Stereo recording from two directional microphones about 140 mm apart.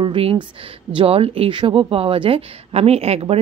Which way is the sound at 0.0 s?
40° right (ahead or behind).